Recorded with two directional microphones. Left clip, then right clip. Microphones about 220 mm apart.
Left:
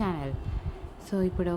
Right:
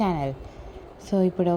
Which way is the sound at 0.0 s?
15° right (ahead or behind).